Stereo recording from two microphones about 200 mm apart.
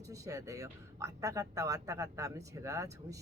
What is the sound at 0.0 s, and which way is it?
Speech, 15° right (ahead or behind).